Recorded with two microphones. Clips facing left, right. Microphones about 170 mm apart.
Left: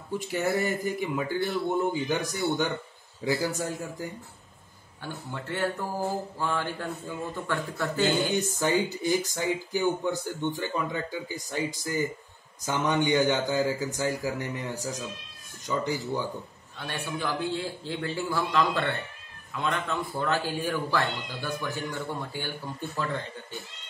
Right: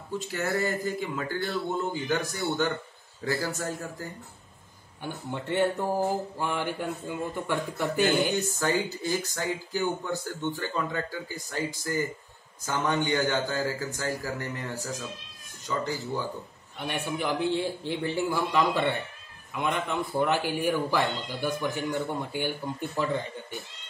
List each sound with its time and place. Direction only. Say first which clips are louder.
0.2 s speech: left 2 dB; 15° left (ahead or behind)
5.0 s speech: right 3 dB; 20° right (ahead or behind)
8.5 s speech: left 2 dB; 15° left (ahead or behind)
16.7 s speech: right 3 dB; 20° right (ahead or behind)